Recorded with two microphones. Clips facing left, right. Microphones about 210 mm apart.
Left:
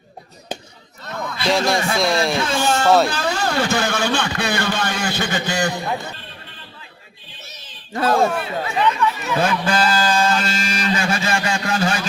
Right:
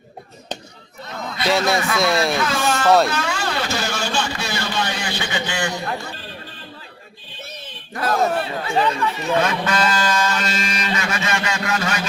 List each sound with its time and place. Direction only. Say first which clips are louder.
1.0 s a sound: left 2 dB; 55° left (ahead or behind)
1.5 s speech: even; centre (ahead or behind)
2.4 s a man's voice: left 1 dB; 30° left (ahead or behind)
7.9 s speech: left 3 dB; 25° left (ahead or behind)
8.4 s speech: right 1 dB; 30° right (ahead or behind)
9.4 s a sound: left 5 dB; 30° left (ahead or behind)